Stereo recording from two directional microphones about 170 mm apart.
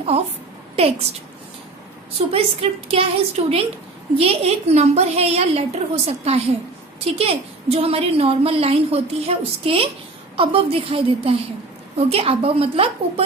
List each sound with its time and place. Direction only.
0.7 s a woman's voice: 35° right (ahead or behind)
2.1 s a woman's voice: 35° right (ahead or behind)